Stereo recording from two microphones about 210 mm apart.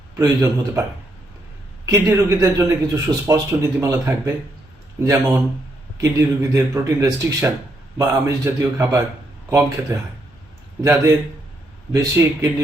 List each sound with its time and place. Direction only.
0.2 s speech: 15° right (ahead or behind)
1.9 s speech: 15° right (ahead or behind)
11.9 s speech: 15° right (ahead or behind)